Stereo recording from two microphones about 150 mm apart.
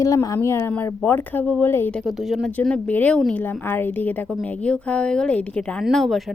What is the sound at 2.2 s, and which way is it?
Speech, centre (ahead or behind).